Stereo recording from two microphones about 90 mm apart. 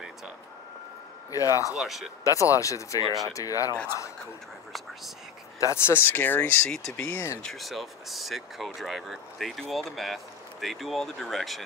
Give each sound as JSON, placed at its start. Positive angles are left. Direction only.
{"t": 1.3, "sound": "speech", "side_deg": 40}
{"t": 1.7, "sound": "speech", "side_deg": -5}
{"t": 2.2, "sound": "speech", "side_deg": 35}
{"t": 5.6, "sound": "speech", "side_deg": 30}
{"t": 6.7, "sound": "speech", "side_deg": 5}
{"t": 7.1, "sound": "speech", "side_deg": 30}
{"t": 7.4, "sound": "speech", "side_deg": 0}